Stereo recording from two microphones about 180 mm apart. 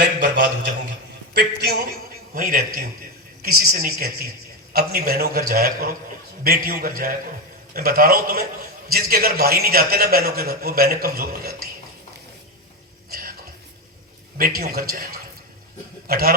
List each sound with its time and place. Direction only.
0.0 s a sound: 50° right (ahead or behind)
1.3 s a man's voice: 60° right (ahead or behind)
13.1 s music: 55° right (ahead or behind)
14.3 s a man's voice: 55° right (ahead or behind)